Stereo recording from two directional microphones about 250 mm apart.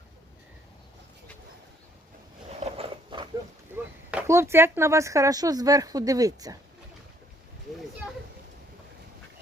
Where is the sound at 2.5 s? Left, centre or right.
Right.